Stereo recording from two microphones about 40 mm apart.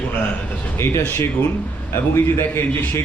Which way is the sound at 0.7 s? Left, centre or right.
Left.